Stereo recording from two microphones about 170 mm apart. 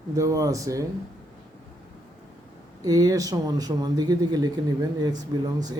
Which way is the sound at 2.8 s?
20° right (ahead or behind).